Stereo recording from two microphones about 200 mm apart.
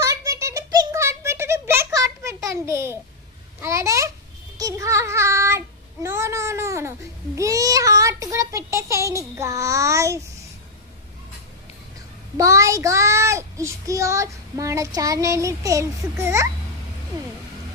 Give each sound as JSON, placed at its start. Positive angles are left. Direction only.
{"t": 0.0, "sound": "a sound", "side_deg": -15}
{"t": 3.6, "sound": "babbling", "side_deg": -15}
{"t": 4.5, "sound": "child singing", "side_deg": -15}
{"t": 12.4, "sound": "a child's voice", "side_deg": -15}